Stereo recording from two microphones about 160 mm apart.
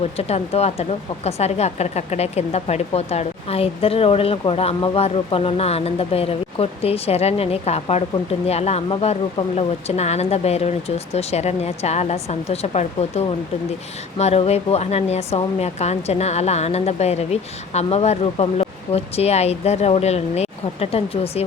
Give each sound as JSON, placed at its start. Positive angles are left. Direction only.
{"t": 0.2, "sound": "a woman's voice", "side_deg": 40}